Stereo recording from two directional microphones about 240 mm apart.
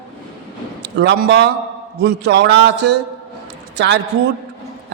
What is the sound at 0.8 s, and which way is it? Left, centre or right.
A man's voice, right.